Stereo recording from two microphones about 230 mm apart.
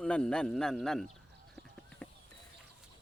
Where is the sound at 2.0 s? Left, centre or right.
Centre.